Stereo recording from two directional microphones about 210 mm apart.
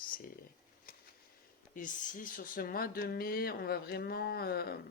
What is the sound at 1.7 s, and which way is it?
Speech, 40° left (ahead or behind).